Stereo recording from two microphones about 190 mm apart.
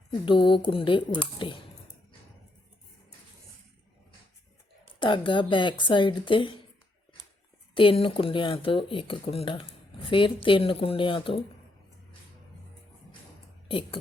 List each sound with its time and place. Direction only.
0.3 s speech: 25° left (ahead or behind)
4.9 s speech: 25° left (ahead or behind)
7.7 s speech: 25° left (ahead or behind)
13.7 s speech: 25° left (ahead or behind)